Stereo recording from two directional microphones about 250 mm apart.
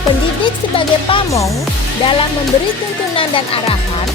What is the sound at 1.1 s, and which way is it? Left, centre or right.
Music, centre.